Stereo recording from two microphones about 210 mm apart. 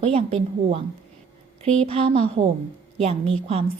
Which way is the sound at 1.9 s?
30° right (ahead or behind).